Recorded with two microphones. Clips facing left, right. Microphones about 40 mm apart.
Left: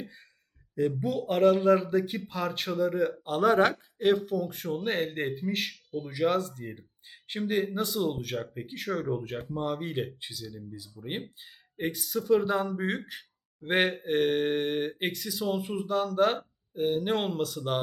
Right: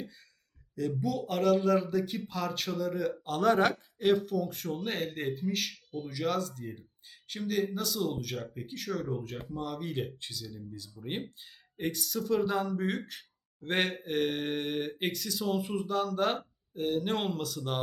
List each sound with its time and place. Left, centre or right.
0.8 s speech: left
1.3 s speech: centre
6.6 s speech: left
10.0 s speech: centre